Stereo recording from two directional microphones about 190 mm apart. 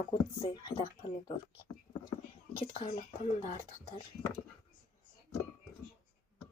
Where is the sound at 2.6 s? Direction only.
30° left (ahead or behind).